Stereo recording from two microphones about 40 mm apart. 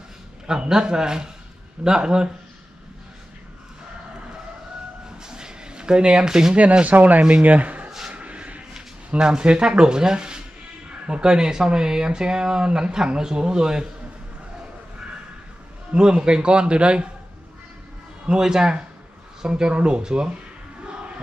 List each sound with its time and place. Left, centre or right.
0.5 s speech: centre
5.2 s a sound: centre
6.8 s speech: right
8.1 s a sound: right
9.2 s speech: right
15.9 s speech: right
18.2 s speech: centre